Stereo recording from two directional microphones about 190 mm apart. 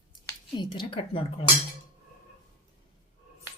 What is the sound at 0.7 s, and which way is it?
Speech, 25° left (ahead or behind).